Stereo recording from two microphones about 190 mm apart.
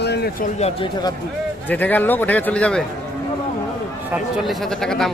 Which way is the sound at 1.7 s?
10° left (ahead or behind).